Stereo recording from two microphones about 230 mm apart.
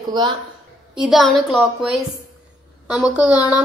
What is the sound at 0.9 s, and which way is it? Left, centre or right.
Speech, centre.